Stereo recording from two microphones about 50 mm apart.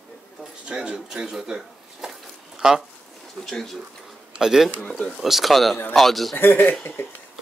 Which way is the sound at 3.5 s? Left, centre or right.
Centre.